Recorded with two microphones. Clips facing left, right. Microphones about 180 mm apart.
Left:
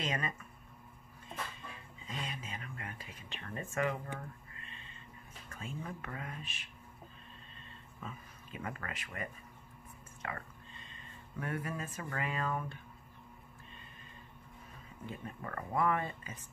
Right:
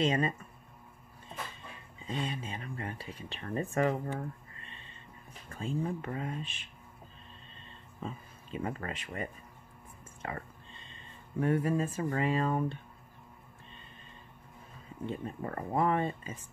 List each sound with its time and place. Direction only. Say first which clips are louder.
0.0 s speech: right 9 dB; 30° right (ahead or behind)
2.0 s speech: right 7 dB; 30° right (ahead or behind)
8.0 s speech: right 6 dB; 30° right (ahead or behind)
15.0 s speech: right 7 dB; 30° right (ahead or behind)